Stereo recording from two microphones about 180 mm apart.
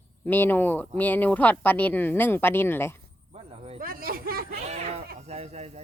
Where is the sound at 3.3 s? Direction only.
35° right (ahead or behind).